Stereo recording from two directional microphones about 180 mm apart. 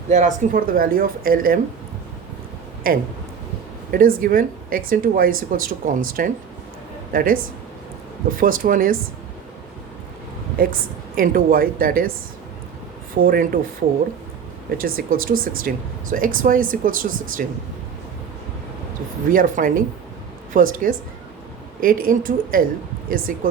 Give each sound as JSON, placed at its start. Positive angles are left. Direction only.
{"t": 0.1, "sound": "speech", "side_deg": -45}
{"t": 2.8, "sound": "a woman's voice", "side_deg": -50}
{"t": 8.4, "sound": "speech", "side_deg": -50}
{"t": 10.6, "sound": "speech", "side_deg": -55}
{"t": 13.2, "sound": "speech", "side_deg": -55}
{"t": 14.8, "sound": "speech", "side_deg": -55}
{"t": 19.3, "sound": "speech", "side_deg": -50}